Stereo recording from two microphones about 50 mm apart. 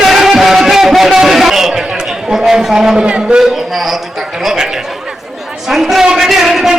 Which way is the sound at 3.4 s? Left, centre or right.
Centre.